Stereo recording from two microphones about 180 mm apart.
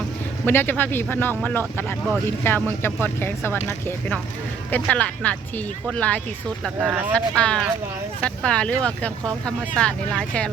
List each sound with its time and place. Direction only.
0.4 s speech: 10° left (ahead or behind)
6.7 s speech: 5° right (ahead or behind)
7.1 s speech: 5° left (ahead or behind)